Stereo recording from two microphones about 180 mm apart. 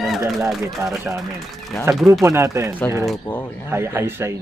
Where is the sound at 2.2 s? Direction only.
15° right (ahead or behind).